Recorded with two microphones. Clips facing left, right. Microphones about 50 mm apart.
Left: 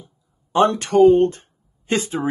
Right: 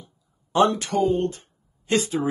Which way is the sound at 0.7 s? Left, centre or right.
Left.